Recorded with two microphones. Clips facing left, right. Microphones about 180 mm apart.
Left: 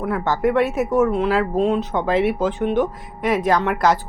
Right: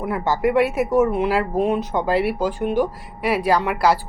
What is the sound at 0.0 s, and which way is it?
Speech, 10° right (ahead or behind).